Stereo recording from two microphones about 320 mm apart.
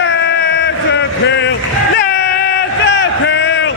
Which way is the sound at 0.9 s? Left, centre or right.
Left.